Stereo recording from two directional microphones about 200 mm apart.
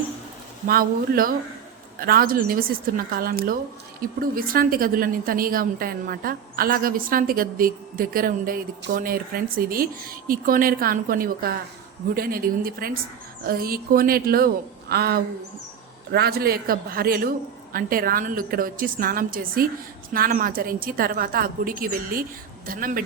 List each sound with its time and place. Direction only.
0.7 s a woman's voice: 45° right (ahead or behind)